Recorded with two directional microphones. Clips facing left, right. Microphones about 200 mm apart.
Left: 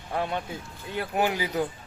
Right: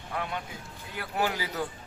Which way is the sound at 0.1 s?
30° left (ahead or behind).